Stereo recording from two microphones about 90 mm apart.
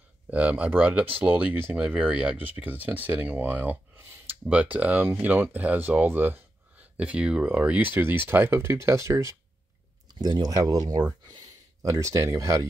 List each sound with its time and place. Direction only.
0.3 s speech: 15° right (ahead or behind); by 9.3 s 35° right (ahead or behind)
10.1 s speech: 50° right (ahead or behind); by 12.6 s 35° right (ahead or behind)